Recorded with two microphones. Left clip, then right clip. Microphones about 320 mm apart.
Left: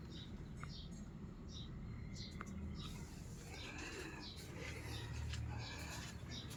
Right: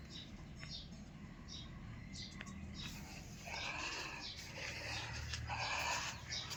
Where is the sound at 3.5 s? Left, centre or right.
Centre.